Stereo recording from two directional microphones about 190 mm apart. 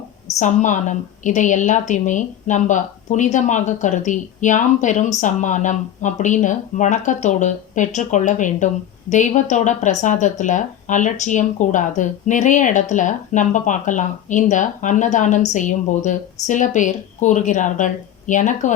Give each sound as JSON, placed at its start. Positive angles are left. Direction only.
{"t": 0.3, "sound": "a woman's voice", "side_deg": 40}